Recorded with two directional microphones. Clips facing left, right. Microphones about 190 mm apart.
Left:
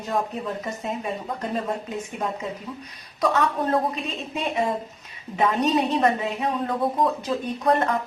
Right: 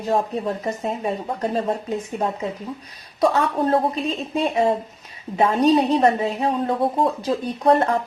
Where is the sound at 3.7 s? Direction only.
35° right (ahead or behind).